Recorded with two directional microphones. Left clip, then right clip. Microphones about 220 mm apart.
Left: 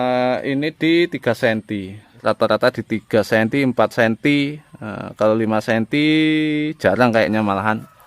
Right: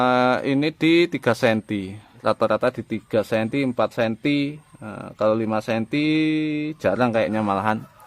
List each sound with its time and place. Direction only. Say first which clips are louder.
0.0 s speech: even; centre (ahead or behind)